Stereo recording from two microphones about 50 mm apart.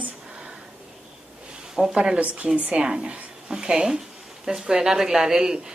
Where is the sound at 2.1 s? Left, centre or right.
Right; by 5.6 s centre.